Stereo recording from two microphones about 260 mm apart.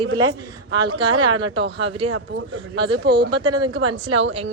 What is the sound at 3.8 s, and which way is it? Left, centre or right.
Speech, right.